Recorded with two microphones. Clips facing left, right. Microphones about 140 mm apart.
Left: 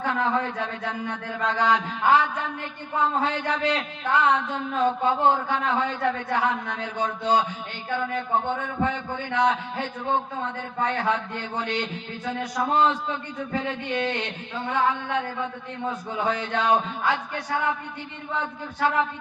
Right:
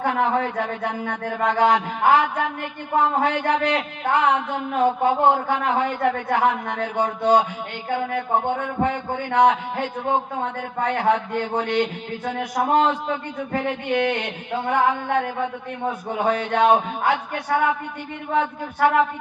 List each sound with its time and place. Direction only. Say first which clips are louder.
0.0 s a man's voice: right 4 dB; 55° right (ahead or behind)